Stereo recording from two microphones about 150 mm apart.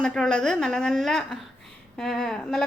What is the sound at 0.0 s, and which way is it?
A woman's voice, 5° left (ahead or behind).